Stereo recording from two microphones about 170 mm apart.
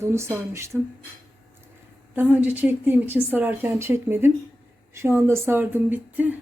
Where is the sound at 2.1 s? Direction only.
10° right (ahead or behind).